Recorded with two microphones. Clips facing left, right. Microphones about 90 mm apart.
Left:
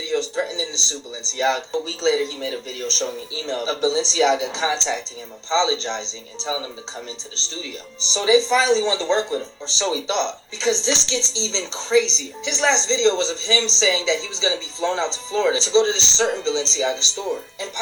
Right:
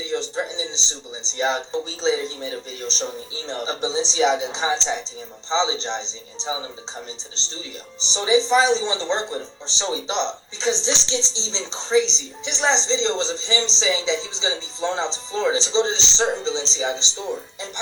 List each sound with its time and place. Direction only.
0.1 s speech: 30° right (ahead or behind)
8.1 s speech: 30° right (ahead or behind)